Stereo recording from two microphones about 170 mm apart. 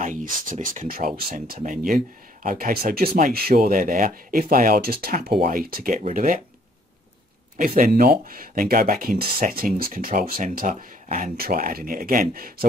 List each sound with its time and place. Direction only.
0.0 s speech: 50° right (ahead or behind)
7.5 s speech: 50° right (ahead or behind)